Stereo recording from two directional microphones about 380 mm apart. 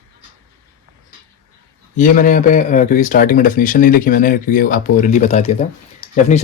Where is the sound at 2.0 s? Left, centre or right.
Left.